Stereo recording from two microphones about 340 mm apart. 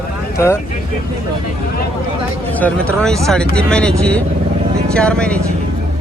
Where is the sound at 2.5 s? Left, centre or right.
Centre.